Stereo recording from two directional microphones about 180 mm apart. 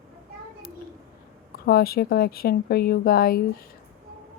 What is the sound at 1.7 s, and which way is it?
A woman's voice, 55° left (ahead or behind).